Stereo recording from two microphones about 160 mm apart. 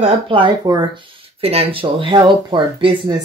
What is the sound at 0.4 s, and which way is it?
Speech, 30° right (ahead or behind).